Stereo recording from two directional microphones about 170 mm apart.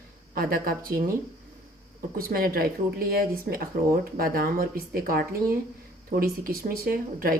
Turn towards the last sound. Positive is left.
turn(degrees=-60)  # may be behind; listen again after turning